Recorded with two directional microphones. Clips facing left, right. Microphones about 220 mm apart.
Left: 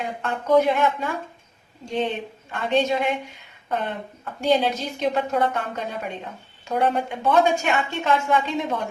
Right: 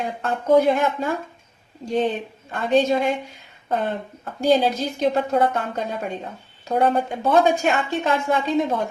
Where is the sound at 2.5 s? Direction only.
40° right (ahead or behind).